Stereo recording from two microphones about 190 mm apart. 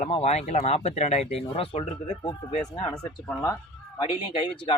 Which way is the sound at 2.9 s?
20° left (ahead or behind).